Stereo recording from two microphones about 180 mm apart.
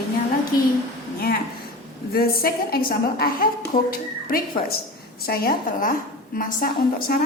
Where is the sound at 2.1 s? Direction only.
55° left (ahead or behind).